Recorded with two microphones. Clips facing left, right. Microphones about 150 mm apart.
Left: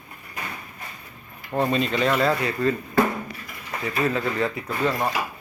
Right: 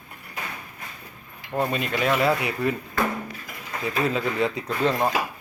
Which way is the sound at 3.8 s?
20° right (ahead or behind).